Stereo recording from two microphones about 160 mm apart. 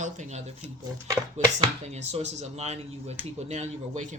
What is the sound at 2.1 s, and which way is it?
Speech, 45° right (ahead or behind).